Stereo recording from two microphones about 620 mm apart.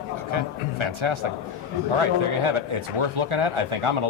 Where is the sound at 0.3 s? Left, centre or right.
Right.